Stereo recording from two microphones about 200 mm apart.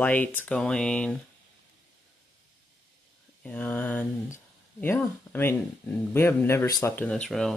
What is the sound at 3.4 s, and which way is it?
Speech, 10° left (ahead or behind).